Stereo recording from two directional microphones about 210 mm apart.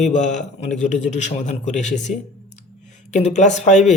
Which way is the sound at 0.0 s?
35° left (ahead or behind).